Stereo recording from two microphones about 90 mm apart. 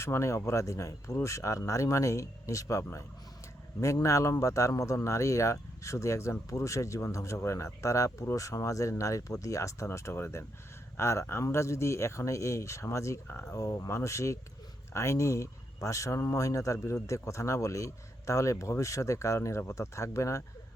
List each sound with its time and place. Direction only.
0.0 s speech: 30° left (ahead or behind)